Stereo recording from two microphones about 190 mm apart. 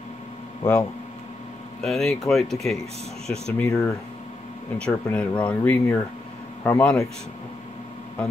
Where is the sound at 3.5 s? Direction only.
15° left (ahead or behind).